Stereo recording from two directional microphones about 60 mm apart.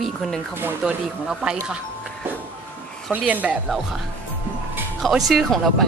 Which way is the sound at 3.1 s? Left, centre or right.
Right.